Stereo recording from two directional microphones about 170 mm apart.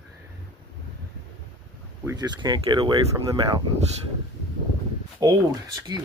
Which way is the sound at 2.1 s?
25° right (ahead or behind).